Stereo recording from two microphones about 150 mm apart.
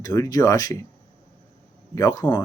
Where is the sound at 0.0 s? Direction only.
20° left (ahead or behind).